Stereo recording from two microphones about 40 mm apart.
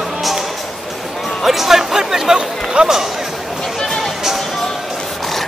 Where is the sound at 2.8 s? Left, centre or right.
Right.